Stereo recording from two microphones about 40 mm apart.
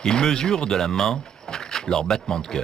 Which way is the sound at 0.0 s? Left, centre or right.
Centre.